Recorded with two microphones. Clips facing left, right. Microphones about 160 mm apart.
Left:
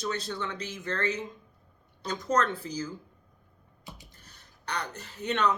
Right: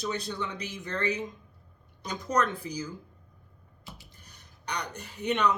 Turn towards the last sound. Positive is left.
turn(degrees=-15)  # may be behind; listen again after turning